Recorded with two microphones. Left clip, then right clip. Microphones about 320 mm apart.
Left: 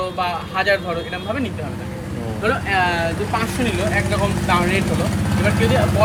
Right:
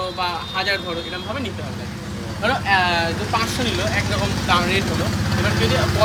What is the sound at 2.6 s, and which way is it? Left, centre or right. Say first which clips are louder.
Speech: right 2 dB; right.